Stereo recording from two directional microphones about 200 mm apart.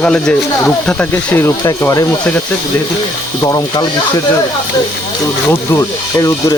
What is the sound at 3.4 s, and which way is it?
Speech, 20° left (ahead or behind).